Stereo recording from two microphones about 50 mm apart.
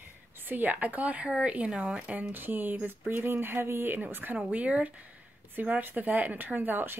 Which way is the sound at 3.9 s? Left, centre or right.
Right.